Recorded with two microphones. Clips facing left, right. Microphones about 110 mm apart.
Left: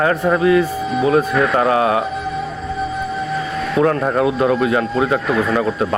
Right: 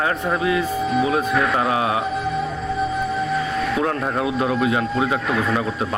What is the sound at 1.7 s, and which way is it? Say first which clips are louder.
Speech: left 5 dB; 45° left (ahead or behind).